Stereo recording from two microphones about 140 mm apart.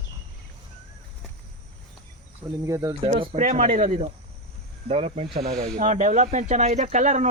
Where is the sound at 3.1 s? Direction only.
45° right (ahead or behind).